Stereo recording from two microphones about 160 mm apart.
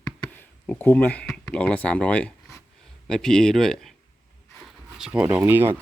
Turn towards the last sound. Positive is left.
turn(degrees=-15)  # may be behind; listen again after turning